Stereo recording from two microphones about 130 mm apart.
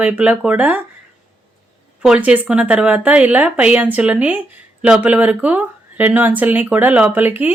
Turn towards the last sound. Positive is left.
turn(degrees=-15)  # may be behind; listen again after turning